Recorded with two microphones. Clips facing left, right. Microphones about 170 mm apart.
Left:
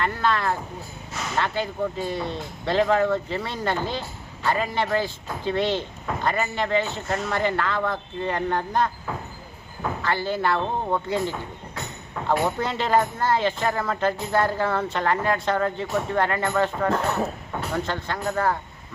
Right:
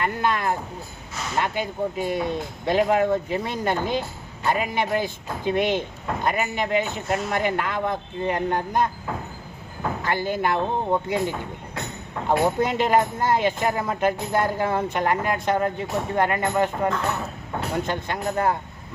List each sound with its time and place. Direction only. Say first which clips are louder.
0.0 s speech: even; 15° right (ahead or behind)
10.0 s speech: even; 15° right (ahead or behind)
12.4 s speech: right 4 dB; 15° right (ahead or behind)